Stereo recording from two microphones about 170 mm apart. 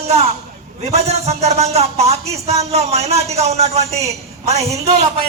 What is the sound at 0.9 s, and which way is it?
A man's voice, 40° right (ahead or behind).